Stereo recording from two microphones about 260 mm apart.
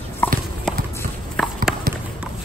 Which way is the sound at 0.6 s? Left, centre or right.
Centre.